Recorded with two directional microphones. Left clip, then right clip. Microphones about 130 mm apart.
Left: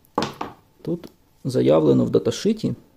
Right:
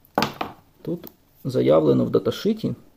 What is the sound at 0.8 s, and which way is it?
Speech, 25° left (ahead or behind).